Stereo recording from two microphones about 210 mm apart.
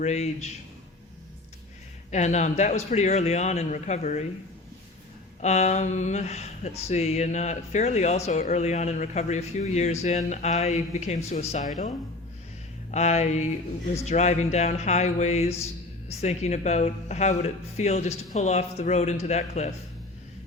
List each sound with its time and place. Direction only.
0.0 s speech: 35° left (ahead or behind)
2.0 s speech: 35° left (ahead or behind)
5.4 s speech: 35° left (ahead or behind)
12.9 s speech: 35° left (ahead or behind)